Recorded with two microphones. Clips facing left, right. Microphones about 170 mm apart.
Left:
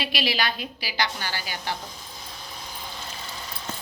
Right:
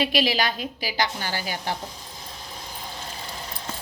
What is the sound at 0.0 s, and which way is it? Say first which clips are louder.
A woman's voice: right 4 dB; 45° right (ahead or behind).